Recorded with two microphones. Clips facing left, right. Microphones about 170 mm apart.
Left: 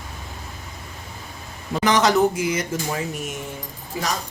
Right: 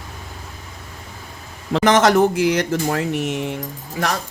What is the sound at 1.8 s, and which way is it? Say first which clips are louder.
Speech: right 3 dB; 50° right (ahead or behind).